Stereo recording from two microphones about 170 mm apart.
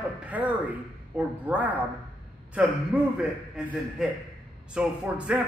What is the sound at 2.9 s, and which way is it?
A man's voice, 10° right (ahead or behind).